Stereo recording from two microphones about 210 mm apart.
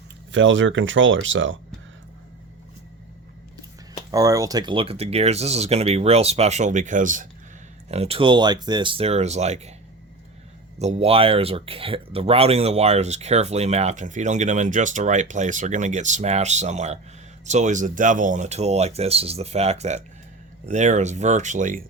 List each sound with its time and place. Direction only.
0.3 s speech: 60° right (ahead or behind)
4.1 s speech: 15° right (ahead or behind); by 9.7 s 30° right (ahead or behind)
10.8 s speech: 30° right (ahead or behind)